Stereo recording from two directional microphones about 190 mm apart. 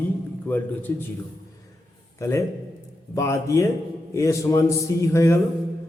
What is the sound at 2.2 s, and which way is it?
Mantra, 15° left (ahead or behind).